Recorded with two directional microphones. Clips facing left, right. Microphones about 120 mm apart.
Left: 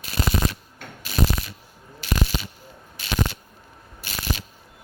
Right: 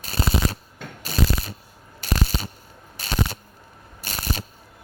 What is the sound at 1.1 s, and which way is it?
Shuffling cards, 35° right (ahead or behind).